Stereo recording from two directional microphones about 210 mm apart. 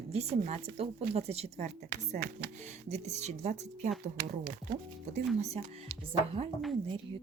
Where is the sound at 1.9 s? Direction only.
45° right (ahead or behind).